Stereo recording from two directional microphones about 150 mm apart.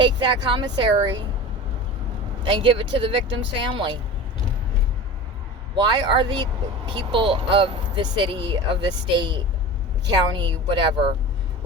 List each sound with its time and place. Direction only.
0.0 s speech: 30° right (ahead or behind)
2.4 s speech: 35° right (ahead or behind)
5.7 s speech: 30° right (ahead or behind)